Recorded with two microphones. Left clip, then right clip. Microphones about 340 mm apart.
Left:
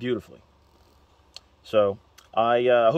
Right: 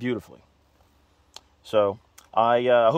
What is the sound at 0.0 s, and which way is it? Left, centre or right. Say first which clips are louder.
Speech: left 1 dB; right.